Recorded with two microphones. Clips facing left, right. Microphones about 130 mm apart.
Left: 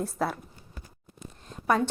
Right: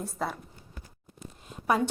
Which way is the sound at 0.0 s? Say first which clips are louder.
Left 4 dB; centre (ahead or behind).